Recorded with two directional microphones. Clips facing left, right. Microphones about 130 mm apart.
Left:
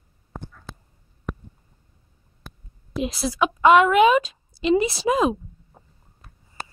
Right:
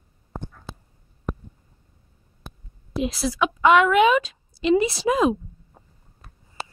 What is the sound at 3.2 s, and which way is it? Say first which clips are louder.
A woman's voice: left 2 dB; 40° left (ahead or behind).